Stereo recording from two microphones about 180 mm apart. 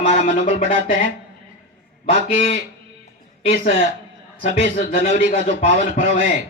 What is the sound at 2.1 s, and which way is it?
A man's voice, 30° left (ahead or behind).